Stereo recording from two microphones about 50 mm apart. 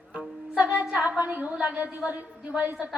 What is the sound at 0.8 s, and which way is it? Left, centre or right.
A woman's voice, right.